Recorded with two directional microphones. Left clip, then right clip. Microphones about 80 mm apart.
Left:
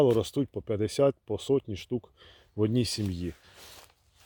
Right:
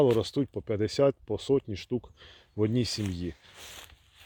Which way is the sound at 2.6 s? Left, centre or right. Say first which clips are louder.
Even; left.